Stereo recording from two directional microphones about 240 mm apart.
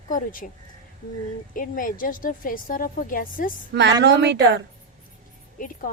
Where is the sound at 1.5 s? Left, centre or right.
Left.